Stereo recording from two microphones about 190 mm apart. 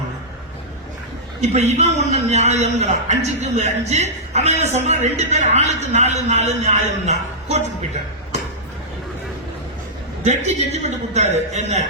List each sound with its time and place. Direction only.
1.4 s a man's voice: 35° right (ahead or behind)
10.2 s a man's voice: 35° right (ahead or behind)